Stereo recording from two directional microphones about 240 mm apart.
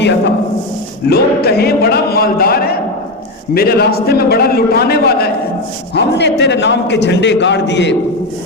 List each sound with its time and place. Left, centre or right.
1.0 s a man's voice: left